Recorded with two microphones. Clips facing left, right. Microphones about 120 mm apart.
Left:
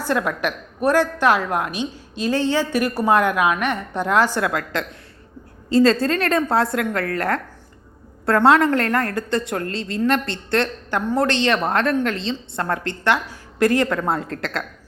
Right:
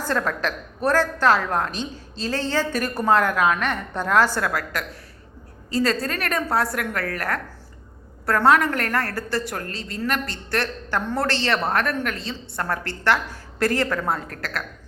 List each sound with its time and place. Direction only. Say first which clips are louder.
0.1 s a woman's voice: left 3 dB; 15° left (ahead or behind)